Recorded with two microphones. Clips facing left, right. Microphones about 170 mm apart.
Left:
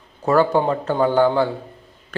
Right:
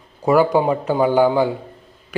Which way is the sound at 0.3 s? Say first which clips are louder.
Right 2 dB; 10° right (ahead or behind).